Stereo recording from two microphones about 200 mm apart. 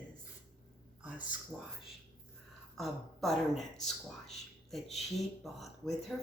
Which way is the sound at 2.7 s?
Centre (ahead or behind).